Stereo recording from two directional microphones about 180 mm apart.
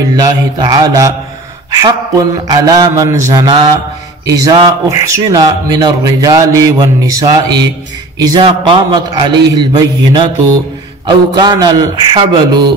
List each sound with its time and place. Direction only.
0.1 s speech: 20° right (ahead or behind)